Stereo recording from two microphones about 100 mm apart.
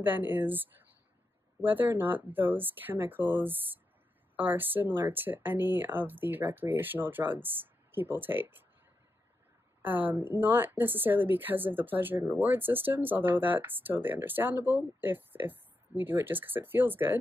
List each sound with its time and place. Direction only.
0.0 s a woman's voice: 20° right (ahead or behind)
9.8 s a woman's voice: 20° right (ahead or behind)